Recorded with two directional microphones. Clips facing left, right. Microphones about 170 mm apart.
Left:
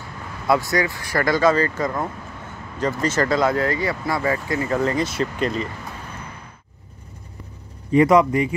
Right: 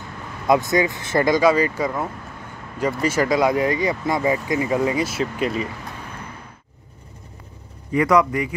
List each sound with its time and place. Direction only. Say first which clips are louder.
0.5 s speech: right 2 dB; 20° right (ahead or behind)
7.9 s a man's voice: left 3 dB; 25° left (ahead or behind)